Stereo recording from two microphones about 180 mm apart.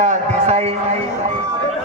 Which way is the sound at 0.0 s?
40° right (ahead or behind).